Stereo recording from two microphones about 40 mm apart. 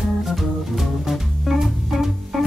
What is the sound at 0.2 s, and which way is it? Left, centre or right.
Music, centre.